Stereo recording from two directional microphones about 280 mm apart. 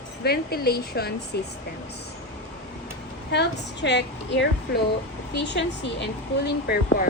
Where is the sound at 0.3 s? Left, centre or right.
Left.